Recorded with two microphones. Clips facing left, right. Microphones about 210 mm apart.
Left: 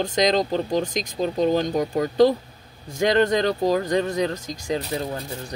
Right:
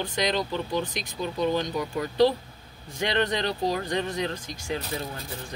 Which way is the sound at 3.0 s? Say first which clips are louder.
Left 7 dB; 45° left (ahead or behind).